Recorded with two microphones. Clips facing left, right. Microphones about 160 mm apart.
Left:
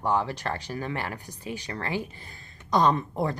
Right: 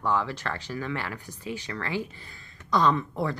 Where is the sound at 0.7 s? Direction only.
45° left (ahead or behind).